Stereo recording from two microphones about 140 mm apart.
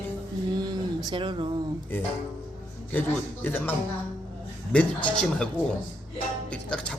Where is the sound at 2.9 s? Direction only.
15° left (ahead or behind).